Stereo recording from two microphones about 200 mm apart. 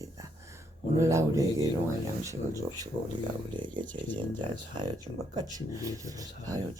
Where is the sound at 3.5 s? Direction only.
25° right (ahead or behind).